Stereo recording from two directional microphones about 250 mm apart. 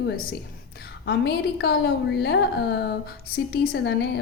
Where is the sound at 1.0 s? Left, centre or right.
Left.